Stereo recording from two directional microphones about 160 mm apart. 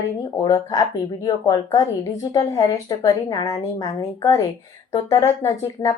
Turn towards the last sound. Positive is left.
turn(degrees=20)  # may be behind; listen again after turning